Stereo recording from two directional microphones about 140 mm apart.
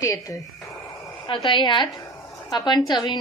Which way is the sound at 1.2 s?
35° left (ahead or behind).